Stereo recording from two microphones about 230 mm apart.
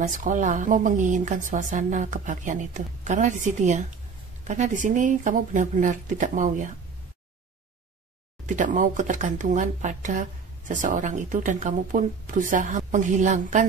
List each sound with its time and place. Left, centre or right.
0.0 s speech: right
8.5 s speech: right